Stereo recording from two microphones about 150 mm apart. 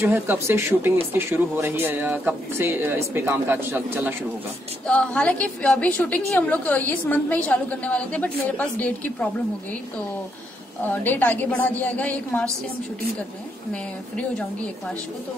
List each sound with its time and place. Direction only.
0.0 s speech: 15° right (ahead or behind)
4.8 s a woman's voice: 5° left (ahead or behind)
10.8 s a woman's voice: 10° left (ahead or behind)
14.1 s a woman's voice: 10° left (ahead or behind)